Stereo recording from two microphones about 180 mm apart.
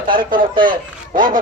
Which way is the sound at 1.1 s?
50° right (ahead or behind).